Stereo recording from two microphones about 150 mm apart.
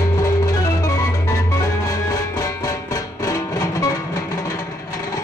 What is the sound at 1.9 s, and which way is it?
Music, 25° left (ahead or behind).